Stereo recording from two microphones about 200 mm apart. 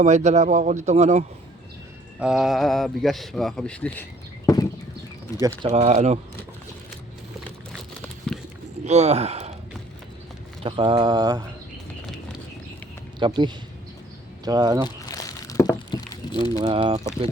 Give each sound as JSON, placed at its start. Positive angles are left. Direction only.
{"t": 0.0, "sound": "speech", "side_deg": -35}
{"t": 2.1, "sound": "speech", "side_deg": -5}
{"t": 5.3, "sound": "speech", "side_deg": 20}
{"t": 5.6, "sound": "speech", "side_deg": -35}
{"t": 8.3, "sound": "a sound", "side_deg": 5}
{"t": 8.8, "sound": "speech", "side_deg": -35}
{"t": 10.6, "sound": "speech", "side_deg": -25}
{"t": 13.1, "sound": "speech", "side_deg": -25}
{"t": 14.8, "sound": "a sound", "side_deg": 15}
{"t": 16.6, "sound": "speech", "side_deg": -25}